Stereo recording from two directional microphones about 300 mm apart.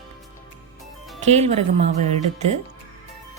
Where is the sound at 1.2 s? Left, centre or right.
Right.